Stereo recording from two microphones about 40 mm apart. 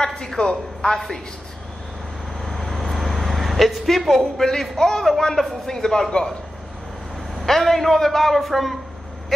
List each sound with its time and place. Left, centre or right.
0.0 s a man's voice: centre
2.4 s a sound: centre
4.4 s a man's voice: centre
7.3 s a man's voice: centre